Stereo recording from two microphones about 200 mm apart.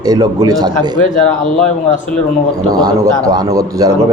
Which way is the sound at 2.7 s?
20° right (ahead or behind).